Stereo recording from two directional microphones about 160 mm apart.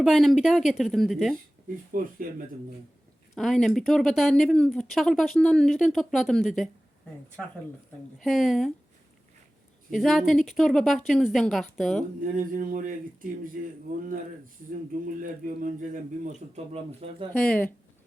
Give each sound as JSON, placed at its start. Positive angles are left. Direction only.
{"t": 0.0, "sound": "speech", "side_deg": 0}
{"t": 2.0, "sound": "speech", "side_deg": -60}
{"t": 3.3, "sound": "speech", "side_deg": 0}
{"t": 8.2, "sound": "speech", "side_deg": 0}
{"t": 9.9, "sound": "speech", "side_deg": 0}
{"t": 12.4, "sound": "speech", "side_deg": -55}
{"t": 15.2, "sound": "speech", "side_deg": -50}
{"t": 17.3, "sound": "speech", "side_deg": 10}